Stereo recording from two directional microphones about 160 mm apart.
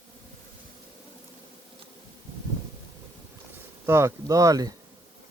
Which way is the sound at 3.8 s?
15° right (ahead or behind).